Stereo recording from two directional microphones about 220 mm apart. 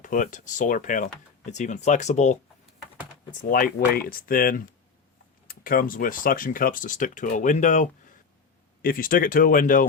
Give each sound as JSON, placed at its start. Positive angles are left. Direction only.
{"t": 0.0, "sound": "speech", "side_deg": 35}
{"t": 3.5, "sound": "speech", "side_deg": 40}